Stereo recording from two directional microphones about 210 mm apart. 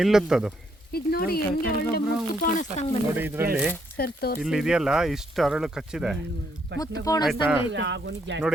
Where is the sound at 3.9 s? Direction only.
45° left (ahead or behind).